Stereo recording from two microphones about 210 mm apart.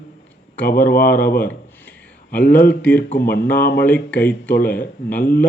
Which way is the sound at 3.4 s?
10° left (ahead or behind).